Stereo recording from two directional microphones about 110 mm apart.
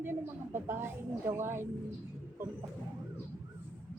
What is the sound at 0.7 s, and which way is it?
Speech, 20° right (ahead or behind).